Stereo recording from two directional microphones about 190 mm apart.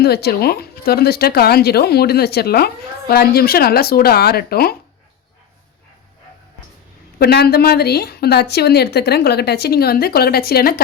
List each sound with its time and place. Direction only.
0.0 s a woman's voice: 55° left (ahead or behind)
7.2 s a woman's voice: 55° left (ahead or behind)